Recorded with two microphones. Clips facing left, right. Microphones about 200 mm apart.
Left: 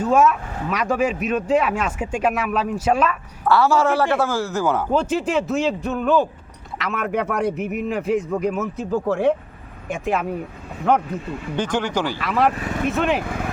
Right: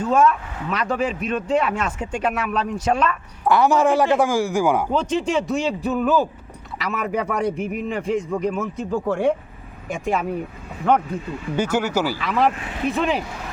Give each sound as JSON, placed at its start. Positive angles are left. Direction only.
{"t": 0.0, "sound": "speech", "side_deg": 10}
{"t": 3.4, "sound": "speech", "side_deg": -15}
{"t": 4.9, "sound": "a man's voice", "side_deg": 5}
{"t": 12.5, "sound": "speech", "side_deg": 45}
{"t": 12.9, "sound": "a man's voice", "side_deg": 0}
{"t": 13.2, "sound": "speech", "side_deg": 55}